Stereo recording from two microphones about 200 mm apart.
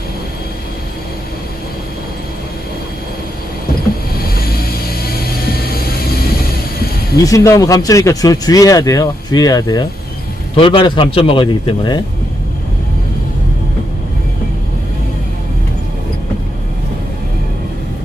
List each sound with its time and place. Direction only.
5.0 s music: 50° left (ahead or behind)
7.2 s a man's voice: 15° left (ahead or behind)